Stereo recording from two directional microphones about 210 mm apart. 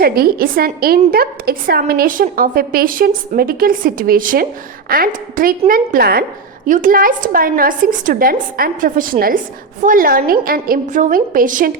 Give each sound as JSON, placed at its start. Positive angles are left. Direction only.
{"t": 0.0, "sound": "a woman's voice", "side_deg": -45}